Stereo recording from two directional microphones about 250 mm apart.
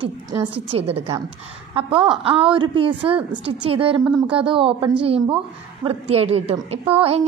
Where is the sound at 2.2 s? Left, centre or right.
Right.